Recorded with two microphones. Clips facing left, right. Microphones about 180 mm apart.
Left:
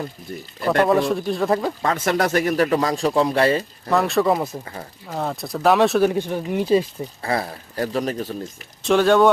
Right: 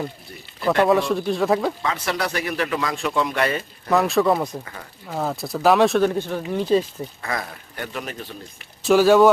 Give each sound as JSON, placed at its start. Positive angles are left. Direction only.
{"t": 0.9, "sound": "speech", "side_deg": 0}
{"t": 1.8, "sound": "a man's voice", "side_deg": 45}
{"t": 3.8, "sound": "speech", "side_deg": 0}
{"t": 7.2, "sound": "a man's voice", "side_deg": 30}
{"t": 8.8, "sound": "speech", "side_deg": -5}